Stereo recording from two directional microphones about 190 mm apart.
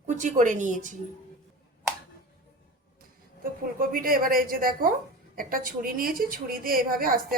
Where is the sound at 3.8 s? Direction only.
50° right (ahead or behind).